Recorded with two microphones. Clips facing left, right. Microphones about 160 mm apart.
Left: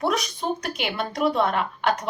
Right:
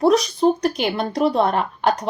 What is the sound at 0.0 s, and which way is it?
Speech, 35° right (ahead or behind).